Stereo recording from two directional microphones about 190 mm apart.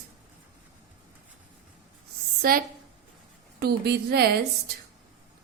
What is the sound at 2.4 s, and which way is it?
A woman's voice, 50° right (ahead or behind).